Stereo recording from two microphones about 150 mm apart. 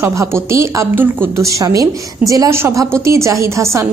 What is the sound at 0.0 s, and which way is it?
A woman's voice, 20° right (ahead or behind).